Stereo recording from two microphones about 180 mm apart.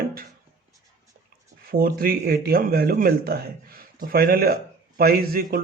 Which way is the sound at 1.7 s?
55° right (ahead or behind).